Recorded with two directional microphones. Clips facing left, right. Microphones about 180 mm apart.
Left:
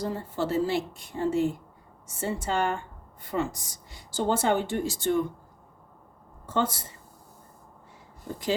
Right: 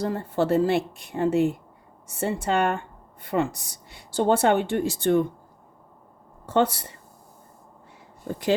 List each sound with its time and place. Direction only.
0.0 s a woman's voice: 60° right (ahead or behind)
6.4 s speech: 65° right (ahead or behind)
8.3 s a woman's voice: 65° right (ahead or behind)